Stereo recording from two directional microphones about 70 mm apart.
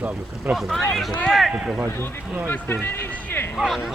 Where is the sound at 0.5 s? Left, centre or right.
Centre.